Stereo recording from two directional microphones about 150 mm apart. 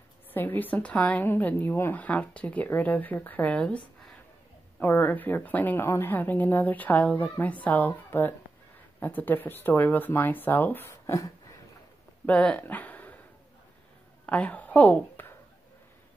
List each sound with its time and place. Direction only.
0.3 s speech: 10° left (ahead or behind)
12.3 s speech: 10° left (ahead or behind)
14.2 s a woman's voice: 10° left (ahead or behind)